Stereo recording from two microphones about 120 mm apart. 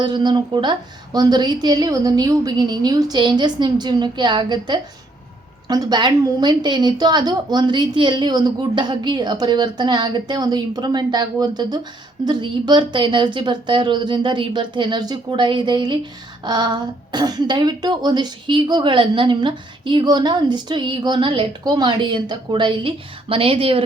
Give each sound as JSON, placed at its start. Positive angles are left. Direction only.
{"t": 0.0, "sound": "speech", "side_deg": -40}